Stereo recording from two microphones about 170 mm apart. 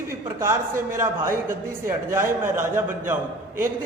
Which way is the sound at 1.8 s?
15° right (ahead or behind).